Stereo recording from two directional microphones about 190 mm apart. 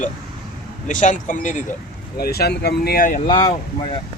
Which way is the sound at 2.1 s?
55° left (ahead or behind).